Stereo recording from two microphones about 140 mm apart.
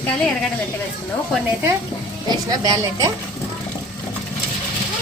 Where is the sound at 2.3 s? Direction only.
30° right (ahead or behind).